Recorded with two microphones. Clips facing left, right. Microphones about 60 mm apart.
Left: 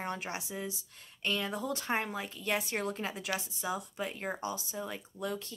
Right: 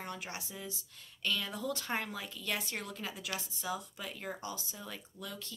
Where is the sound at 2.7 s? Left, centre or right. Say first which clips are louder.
Left 6 dB; left.